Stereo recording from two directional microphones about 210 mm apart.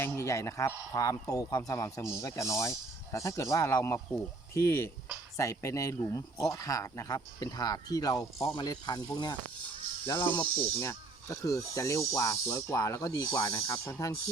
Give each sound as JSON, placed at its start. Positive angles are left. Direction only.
{"t": 0.0, "sound": "a man's voice", "side_deg": 15}
{"t": 10.2, "sound": "a man's voice", "side_deg": 10}